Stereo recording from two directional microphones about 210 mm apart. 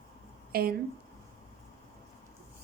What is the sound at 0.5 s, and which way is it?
Speech, 45° right (ahead or behind).